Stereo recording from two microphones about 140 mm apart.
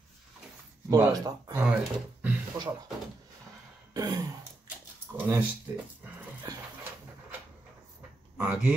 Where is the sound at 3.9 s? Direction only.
25° right (ahead or behind).